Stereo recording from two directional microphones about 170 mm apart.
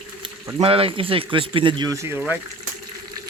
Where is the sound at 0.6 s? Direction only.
35° right (ahead or behind); by 2.4 s 10° right (ahead or behind).